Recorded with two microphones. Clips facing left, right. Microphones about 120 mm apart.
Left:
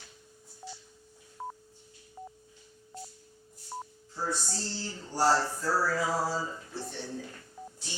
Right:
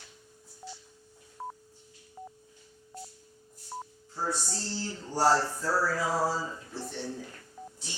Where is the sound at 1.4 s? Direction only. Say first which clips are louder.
Even; centre (ahead or behind).